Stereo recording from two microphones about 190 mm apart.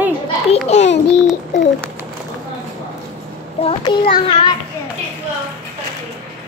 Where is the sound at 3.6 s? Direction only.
25° left (ahead or behind).